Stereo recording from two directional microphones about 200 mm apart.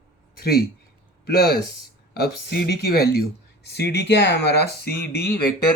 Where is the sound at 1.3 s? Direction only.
50° left (ahead or behind).